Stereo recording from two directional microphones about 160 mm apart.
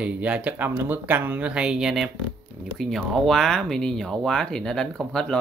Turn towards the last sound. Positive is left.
turn(degrees=5)  # may be behind; listen again after turning